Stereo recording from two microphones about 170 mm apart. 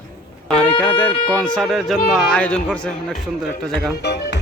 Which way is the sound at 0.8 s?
10° left (ahead or behind).